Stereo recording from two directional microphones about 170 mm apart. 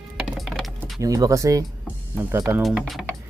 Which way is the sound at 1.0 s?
20° right (ahead or behind).